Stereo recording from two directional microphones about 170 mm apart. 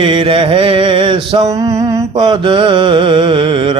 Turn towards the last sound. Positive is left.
turn(degrees=-30)  # may be behind; listen again after turning